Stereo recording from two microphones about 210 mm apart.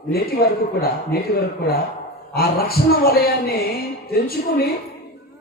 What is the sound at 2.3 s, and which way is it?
A man's voice, 45° left (ahead or behind).